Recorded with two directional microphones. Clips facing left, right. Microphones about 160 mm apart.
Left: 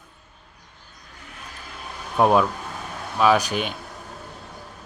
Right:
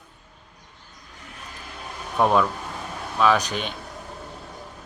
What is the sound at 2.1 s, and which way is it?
Speech, 15° left (ahead or behind).